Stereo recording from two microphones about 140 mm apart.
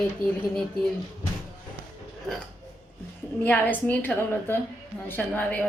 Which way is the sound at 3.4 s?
10° left (ahead or behind).